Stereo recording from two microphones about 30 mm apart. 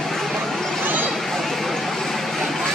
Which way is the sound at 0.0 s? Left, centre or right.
Centre.